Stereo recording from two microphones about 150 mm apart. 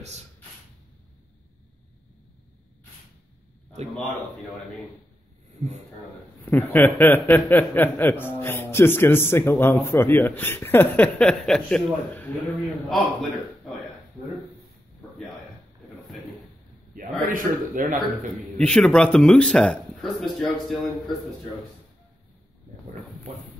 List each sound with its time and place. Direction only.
6.4 s a man's voice: 15° left (ahead or behind)
17.0 s a man's voice: 70° right (ahead or behind)
18.6 s a man's voice: 5° left (ahead or behind)